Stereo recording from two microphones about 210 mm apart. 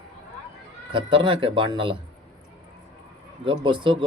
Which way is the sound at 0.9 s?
25° right (ahead or behind).